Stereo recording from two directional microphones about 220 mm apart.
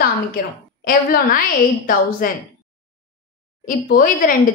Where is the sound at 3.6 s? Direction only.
40° left (ahead or behind).